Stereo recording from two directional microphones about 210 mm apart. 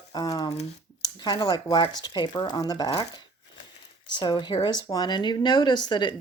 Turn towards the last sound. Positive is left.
turn(degrees=20)  # may be behind; listen again after turning